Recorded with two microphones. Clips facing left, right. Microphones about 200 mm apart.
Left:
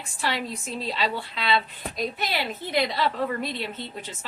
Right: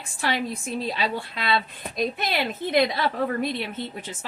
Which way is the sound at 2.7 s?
55° right (ahead or behind).